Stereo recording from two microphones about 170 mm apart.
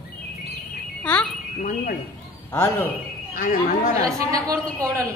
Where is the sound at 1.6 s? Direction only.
55° left (ahead or behind).